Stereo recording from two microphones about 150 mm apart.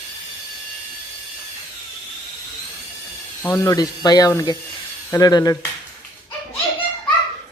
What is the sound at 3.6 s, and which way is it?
Speech, 25° left (ahead or behind).